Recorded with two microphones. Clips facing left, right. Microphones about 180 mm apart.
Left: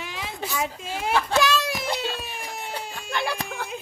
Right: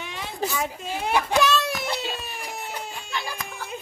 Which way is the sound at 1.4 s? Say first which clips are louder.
Right 1 dB; centre (ahead or behind).